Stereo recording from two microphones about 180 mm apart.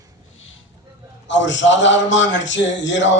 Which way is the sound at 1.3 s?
90° left.